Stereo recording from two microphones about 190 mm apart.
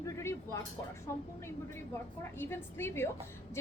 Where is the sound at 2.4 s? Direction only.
10° left (ahead or behind).